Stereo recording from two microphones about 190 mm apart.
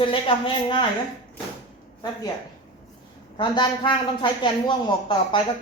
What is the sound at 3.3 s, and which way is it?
A woman's voice, 25° left (ahead or behind).